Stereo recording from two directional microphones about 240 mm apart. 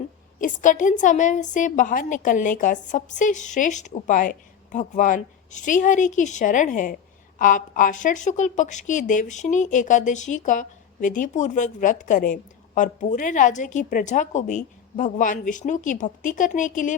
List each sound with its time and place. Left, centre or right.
0.3 s a woman's voice: left